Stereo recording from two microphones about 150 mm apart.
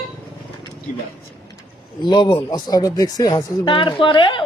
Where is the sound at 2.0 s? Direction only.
30° left (ahead or behind).